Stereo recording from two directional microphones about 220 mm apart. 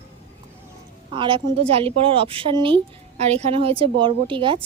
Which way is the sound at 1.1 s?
25° right (ahead or behind).